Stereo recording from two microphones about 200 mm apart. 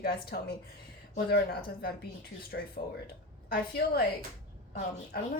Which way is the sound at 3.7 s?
55° left (ahead or behind).